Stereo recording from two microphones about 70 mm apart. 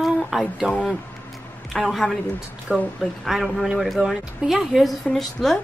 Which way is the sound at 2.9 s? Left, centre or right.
Centre.